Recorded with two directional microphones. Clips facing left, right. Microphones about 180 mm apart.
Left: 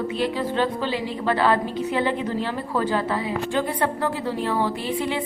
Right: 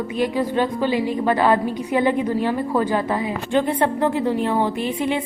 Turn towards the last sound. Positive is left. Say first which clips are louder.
# right 3 dB
turn(degrees=-20)  # may be behind; listen again after turning